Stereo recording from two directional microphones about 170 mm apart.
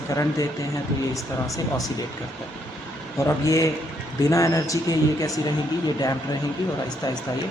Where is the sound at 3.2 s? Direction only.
20° left (ahead or behind).